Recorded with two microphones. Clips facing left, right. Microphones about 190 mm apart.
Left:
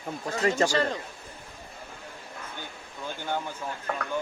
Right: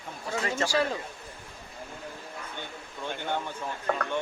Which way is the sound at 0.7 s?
10° right (ahead or behind).